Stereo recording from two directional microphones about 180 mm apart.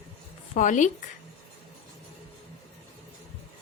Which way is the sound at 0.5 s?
45° left (ahead or behind).